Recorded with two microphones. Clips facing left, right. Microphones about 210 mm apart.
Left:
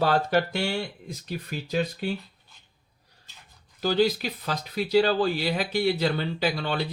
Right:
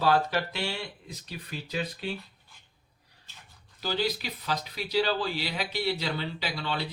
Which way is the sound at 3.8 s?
50° left (ahead or behind).